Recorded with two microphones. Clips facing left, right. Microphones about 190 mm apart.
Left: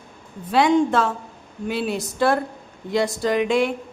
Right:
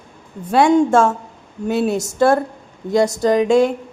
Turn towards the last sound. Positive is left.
turn(degrees=-45)  # may be behind; listen again after turning